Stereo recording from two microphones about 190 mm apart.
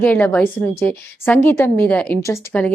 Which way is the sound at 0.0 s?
10° left (ahead or behind).